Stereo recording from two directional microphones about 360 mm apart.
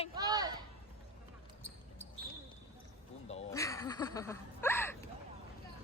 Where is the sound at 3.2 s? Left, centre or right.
Centre.